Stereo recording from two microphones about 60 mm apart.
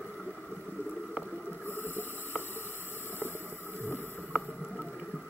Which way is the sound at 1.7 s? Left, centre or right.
Right.